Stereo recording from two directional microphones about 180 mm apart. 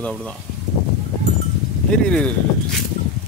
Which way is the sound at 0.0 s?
5° left (ahead or behind).